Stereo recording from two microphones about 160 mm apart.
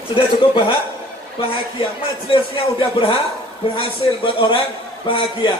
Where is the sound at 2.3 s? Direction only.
35° left (ahead or behind).